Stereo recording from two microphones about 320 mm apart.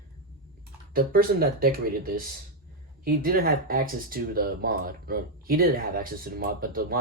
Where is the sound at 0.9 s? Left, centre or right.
Right.